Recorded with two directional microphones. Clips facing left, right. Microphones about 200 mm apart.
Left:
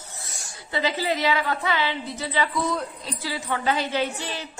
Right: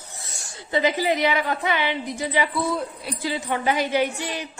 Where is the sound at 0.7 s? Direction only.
15° right (ahead or behind).